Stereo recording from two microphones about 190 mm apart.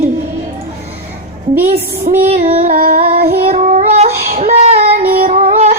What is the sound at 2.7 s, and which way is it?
Child singing, 50° right (ahead or behind).